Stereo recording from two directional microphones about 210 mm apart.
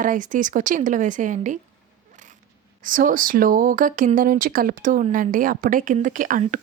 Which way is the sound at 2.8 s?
40° right (ahead or behind).